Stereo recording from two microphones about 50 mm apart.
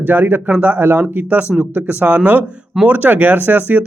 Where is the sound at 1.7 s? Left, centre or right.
Right.